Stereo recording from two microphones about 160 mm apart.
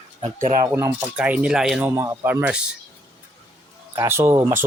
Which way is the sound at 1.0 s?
10° right (ahead or behind).